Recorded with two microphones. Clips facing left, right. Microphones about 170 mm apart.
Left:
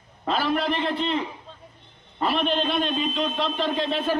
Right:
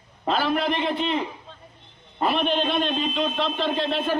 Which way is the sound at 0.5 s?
5° right (ahead or behind).